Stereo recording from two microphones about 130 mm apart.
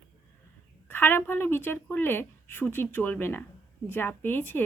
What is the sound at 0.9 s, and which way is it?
Speech, 15° left (ahead or behind).